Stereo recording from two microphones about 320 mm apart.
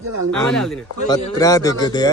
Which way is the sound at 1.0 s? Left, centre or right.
Centre.